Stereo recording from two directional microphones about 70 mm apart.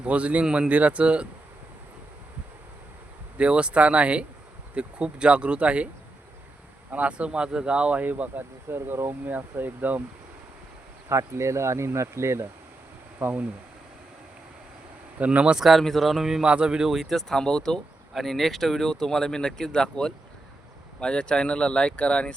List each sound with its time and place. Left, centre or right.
0.0 s speech: centre
3.3 s speech: centre
6.9 s speech: centre
11.1 s speech: right
13.2 s speech: right
15.2 s speech: centre
15.5 s speech: centre